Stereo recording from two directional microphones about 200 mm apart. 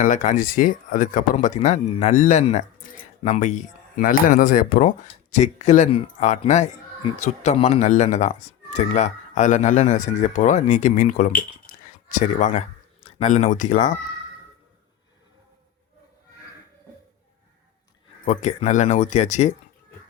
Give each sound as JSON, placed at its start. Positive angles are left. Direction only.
{"t": 0.0, "sound": "speech", "side_deg": 40}
{"t": 18.3, "sound": "speech", "side_deg": 35}